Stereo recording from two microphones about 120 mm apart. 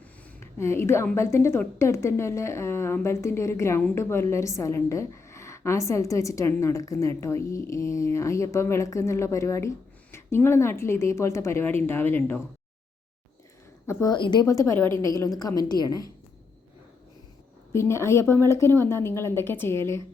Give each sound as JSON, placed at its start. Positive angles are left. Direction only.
{"t": 0.3, "sound": "a woman's voice", "side_deg": 20}
{"t": 13.8, "sound": "a woman's voice", "side_deg": 30}
{"t": 14.2, "sound": "a woman's voice", "side_deg": 40}
{"t": 14.4, "sound": "a woman's voice", "side_deg": 25}
{"t": 17.7, "sound": "a woman's voice", "side_deg": 20}